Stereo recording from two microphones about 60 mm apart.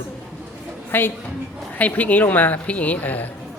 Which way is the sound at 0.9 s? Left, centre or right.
Left.